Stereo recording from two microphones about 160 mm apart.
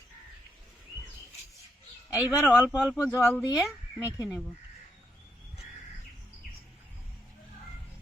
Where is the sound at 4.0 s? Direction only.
20° left (ahead or behind).